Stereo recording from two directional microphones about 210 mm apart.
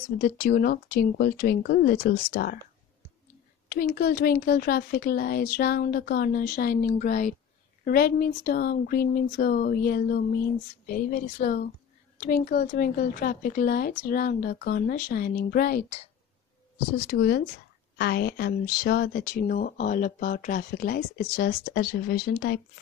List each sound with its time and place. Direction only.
0.2 s speech: 45° left (ahead or behind)
3.6 s speech: 45° left (ahead or behind)
17.1 s speech: 50° left (ahead or behind)